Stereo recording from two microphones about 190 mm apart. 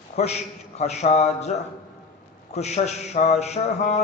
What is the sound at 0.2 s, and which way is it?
Mantra, 35° left (ahead or behind).